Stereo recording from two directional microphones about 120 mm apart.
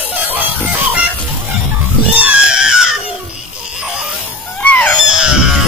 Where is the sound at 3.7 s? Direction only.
5° right (ahead or behind).